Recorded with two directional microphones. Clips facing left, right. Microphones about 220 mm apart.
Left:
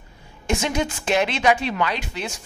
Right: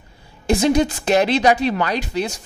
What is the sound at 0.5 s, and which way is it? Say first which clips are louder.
Speech: right 7 dB; 35° right (ahead or behind).